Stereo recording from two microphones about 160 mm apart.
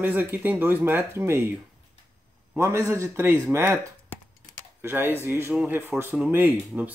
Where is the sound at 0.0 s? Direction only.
10° right (ahead or behind).